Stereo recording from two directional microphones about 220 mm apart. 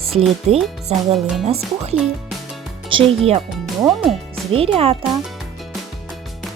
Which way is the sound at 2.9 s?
25° right (ahead or behind).